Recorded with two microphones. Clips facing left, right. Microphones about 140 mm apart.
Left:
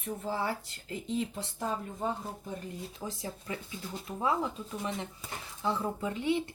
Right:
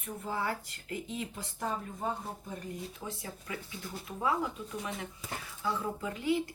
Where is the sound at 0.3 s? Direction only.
30° left (ahead or behind).